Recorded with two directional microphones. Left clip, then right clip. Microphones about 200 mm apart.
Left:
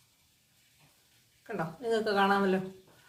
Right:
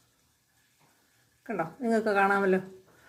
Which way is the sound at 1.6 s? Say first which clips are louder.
Right 2 dB; 40° right (ahead or behind).